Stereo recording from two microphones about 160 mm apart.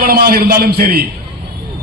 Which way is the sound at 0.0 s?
65° right (ahead or behind).